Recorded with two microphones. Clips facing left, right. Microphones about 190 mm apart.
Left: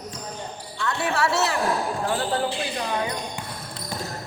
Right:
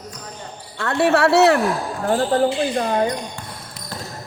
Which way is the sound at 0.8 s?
65° right (ahead or behind).